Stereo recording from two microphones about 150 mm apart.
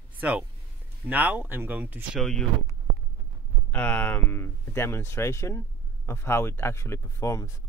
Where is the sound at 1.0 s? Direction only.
10° right (ahead or behind).